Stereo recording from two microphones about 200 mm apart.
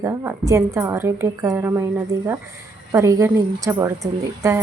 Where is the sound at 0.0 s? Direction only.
15° right (ahead or behind).